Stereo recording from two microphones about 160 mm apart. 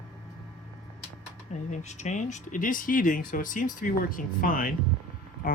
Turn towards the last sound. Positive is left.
turn(degrees=65)  # may be behind; listen again after turning